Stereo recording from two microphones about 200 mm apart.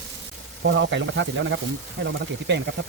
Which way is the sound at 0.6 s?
65° right (ahead or behind).